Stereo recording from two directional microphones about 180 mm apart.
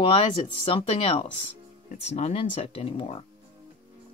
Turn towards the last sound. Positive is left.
turn(degrees=30)  # may be behind; listen again after turning